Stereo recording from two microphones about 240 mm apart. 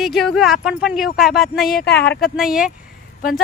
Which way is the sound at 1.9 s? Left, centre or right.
Left.